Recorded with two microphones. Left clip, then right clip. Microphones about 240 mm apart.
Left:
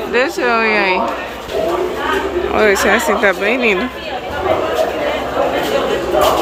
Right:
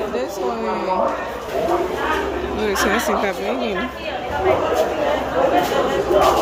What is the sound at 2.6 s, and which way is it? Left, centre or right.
Speech, centre.